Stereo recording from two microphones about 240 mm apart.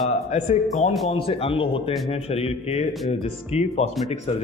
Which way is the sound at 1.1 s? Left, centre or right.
Left.